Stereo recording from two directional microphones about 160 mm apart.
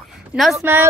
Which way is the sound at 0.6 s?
15° right (ahead or behind).